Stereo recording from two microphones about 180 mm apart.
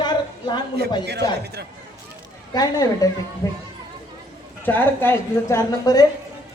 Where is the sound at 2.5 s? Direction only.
20° left (ahead or behind).